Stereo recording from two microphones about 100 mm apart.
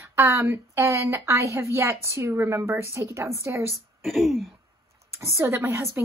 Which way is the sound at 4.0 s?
Centre (ahead or behind).